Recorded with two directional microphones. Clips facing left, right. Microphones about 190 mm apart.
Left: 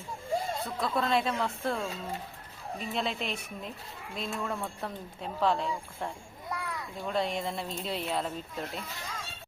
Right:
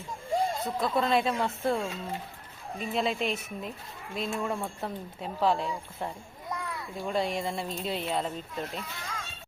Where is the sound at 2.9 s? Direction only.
5° right (ahead or behind).